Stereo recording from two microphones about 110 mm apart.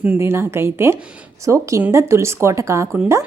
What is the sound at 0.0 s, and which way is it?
A woman's voice, 20° right (ahead or behind).